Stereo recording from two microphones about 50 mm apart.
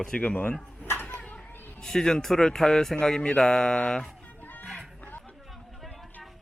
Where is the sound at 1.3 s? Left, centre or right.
Centre.